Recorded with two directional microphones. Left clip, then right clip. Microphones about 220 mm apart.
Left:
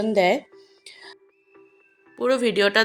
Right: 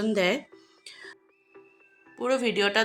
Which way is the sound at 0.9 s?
10° left (ahead or behind).